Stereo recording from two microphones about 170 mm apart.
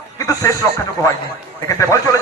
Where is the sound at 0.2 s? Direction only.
20° left (ahead or behind).